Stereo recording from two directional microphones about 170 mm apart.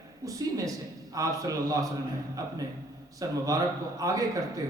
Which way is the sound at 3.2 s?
20° right (ahead or behind).